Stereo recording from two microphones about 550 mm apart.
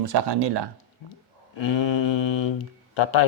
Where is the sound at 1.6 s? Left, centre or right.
Left.